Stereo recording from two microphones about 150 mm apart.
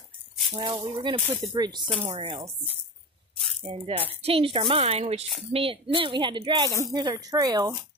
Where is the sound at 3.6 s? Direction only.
40° right (ahead or behind).